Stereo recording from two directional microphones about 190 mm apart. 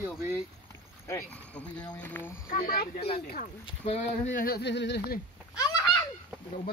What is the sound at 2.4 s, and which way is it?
Speech, 50° left (ahead or behind).